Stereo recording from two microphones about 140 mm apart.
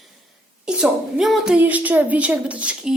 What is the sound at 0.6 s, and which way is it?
A woman's voice, 5° right (ahead or behind).